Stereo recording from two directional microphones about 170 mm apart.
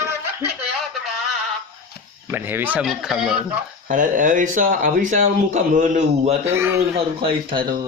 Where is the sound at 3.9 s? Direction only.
50° right (ahead or behind).